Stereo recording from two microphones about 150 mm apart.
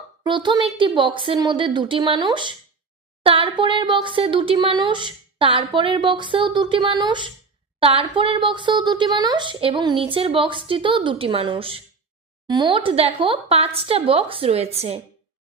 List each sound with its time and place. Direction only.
0.2 s speech: 30° right (ahead or behind)